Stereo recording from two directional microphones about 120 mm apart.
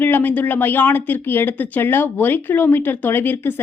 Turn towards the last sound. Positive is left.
turn(degrees=15)  # may be behind; listen again after turning